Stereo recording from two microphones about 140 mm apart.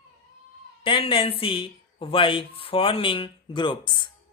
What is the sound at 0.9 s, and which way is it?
Speech, 40° left (ahead or behind).